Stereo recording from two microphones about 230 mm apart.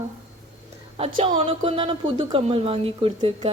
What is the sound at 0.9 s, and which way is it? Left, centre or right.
Speech, right.